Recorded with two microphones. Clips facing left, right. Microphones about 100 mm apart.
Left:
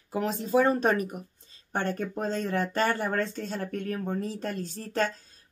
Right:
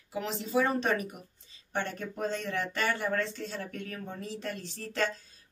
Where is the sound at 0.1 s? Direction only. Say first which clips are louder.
Left 5 dB; 45° left (ahead or behind).